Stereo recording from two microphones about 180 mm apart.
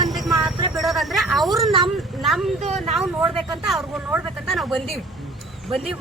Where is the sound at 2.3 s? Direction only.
Centre (ahead or behind).